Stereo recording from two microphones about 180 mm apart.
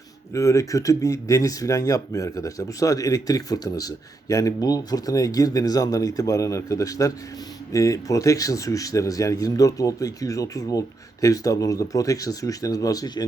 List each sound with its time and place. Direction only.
0.3 s speech: 15° left (ahead or behind)